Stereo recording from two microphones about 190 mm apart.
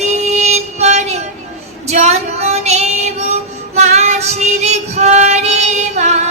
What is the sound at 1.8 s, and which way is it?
Female singing, 35° right (ahead or behind).